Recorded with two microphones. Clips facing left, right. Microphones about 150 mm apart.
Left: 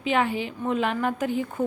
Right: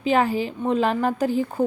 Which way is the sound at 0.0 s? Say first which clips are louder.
Right 4 dB; 40° right (ahead or behind).